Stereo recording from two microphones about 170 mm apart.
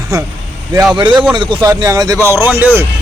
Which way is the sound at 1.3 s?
30° right (ahead or behind).